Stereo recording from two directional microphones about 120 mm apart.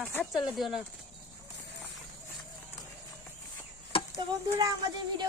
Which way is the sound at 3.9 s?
50° left (ahead or behind).